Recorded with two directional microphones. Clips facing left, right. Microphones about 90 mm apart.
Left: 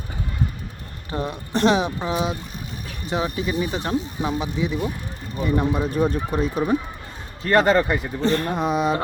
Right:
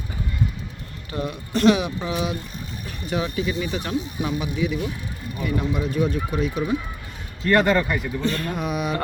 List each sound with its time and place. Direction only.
1.1 s speech: 30° left (ahead or behind)